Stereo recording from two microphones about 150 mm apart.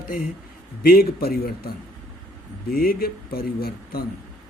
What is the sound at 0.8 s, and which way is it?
A man's voice, 85° left.